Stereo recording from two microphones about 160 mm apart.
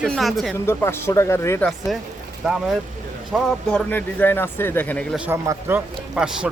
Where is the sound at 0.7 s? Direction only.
15° left (ahead or behind).